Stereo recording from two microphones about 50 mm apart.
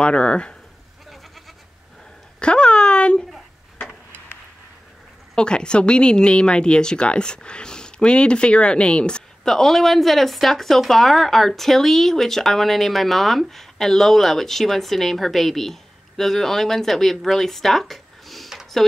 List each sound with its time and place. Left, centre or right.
0.0 s speech: left
2.4 s a sound: left
5.3 s speech: centre
9.5 s speech: centre